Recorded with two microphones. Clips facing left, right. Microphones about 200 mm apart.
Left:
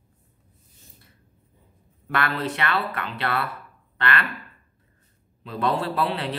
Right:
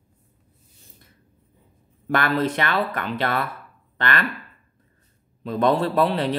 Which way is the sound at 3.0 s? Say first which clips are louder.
Right 3 dB; 45° right (ahead or behind).